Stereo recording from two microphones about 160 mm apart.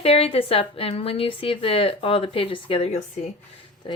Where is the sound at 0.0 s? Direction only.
35° left (ahead or behind).